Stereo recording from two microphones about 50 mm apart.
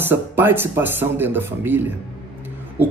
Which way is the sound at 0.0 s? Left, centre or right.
Right.